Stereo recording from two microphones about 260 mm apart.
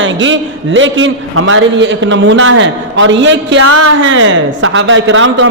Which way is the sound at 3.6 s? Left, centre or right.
Right.